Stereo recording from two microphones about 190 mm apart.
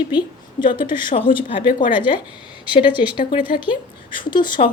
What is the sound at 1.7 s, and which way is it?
Speech, 45° left (ahead or behind).